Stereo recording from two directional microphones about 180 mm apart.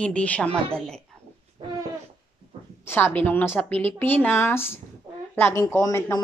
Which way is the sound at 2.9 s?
10° left (ahead or behind).